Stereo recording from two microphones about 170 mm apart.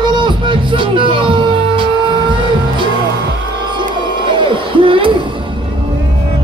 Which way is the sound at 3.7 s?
30° right (ahead or behind).